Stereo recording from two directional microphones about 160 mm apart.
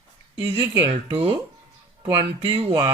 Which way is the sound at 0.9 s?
35° right (ahead or behind).